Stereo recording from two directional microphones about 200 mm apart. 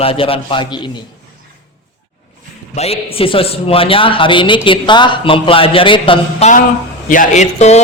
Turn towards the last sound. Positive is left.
turn(degrees=35)  # may be behind; listen again after turning